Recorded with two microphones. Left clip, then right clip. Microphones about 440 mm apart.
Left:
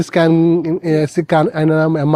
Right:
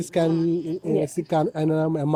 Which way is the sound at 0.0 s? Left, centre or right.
Left.